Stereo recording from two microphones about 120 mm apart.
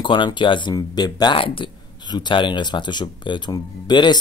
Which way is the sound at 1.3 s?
50° left (ahead or behind).